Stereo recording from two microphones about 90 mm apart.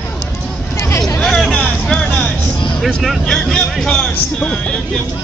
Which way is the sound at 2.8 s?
Centre (ahead or behind).